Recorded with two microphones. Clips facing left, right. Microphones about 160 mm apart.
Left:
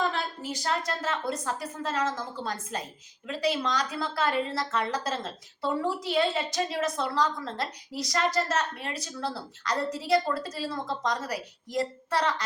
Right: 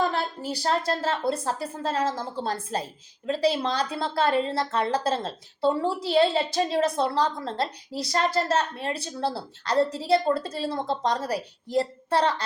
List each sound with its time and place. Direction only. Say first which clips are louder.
0.0 s a woman's voice: right 4 dB; 35° right (ahead or behind)